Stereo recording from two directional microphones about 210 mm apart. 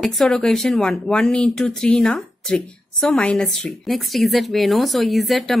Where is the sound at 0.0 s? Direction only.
Centre (ahead or behind).